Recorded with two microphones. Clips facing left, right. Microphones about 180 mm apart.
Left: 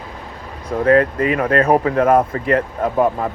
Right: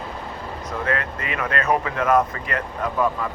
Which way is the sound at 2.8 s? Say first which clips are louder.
Left 6 dB; 45° left (ahead or behind).